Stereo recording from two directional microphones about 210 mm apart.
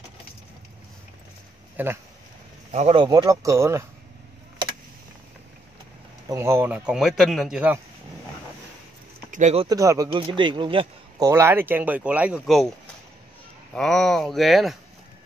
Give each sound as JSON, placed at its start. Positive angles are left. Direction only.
{"t": 1.8, "sound": "a man's voice", "side_deg": -10}
{"t": 2.7, "sound": "speech", "side_deg": -30}
{"t": 6.2, "sound": "speech", "side_deg": -15}
{"t": 9.3, "sound": "speech", "side_deg": -30}
{"t": 9.7, "sound": "a man's voice", "side_deg": -15}
{"t": 13.7, "sound": "speech", "side_deg": 0}